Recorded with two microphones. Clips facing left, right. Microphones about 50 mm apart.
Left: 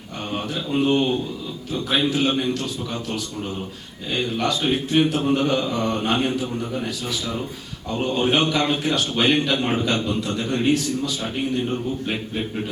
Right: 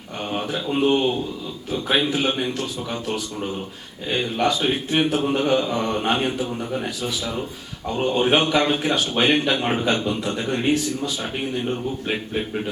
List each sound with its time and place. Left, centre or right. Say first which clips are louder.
0.3 s speech: right 1 dB; centre
1.7 s mantra: even; centre